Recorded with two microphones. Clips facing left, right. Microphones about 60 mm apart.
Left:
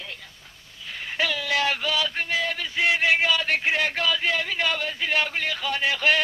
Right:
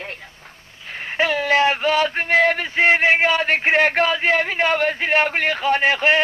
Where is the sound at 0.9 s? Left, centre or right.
Right.